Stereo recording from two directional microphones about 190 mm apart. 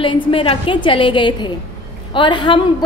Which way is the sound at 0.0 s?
30° left (ahead or behind).